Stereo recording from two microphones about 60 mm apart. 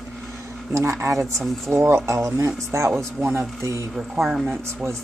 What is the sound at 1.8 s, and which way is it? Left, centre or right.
Speech, right.